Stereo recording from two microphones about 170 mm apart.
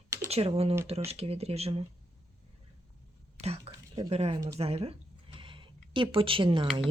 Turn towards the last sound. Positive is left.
turn(degrees=-30)  # may be behind; listen again after turning